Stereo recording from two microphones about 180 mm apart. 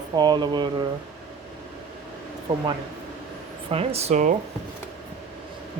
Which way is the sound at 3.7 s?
35° right (ahead or behind).